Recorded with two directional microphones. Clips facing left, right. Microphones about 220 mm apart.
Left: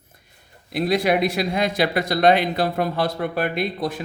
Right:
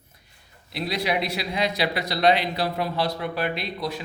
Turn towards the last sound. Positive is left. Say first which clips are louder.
# left 5 dB
turn(degrees=50)  # may be behind; listen again after turning